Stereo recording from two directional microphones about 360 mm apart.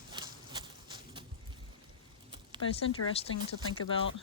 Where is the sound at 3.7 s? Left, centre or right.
Left.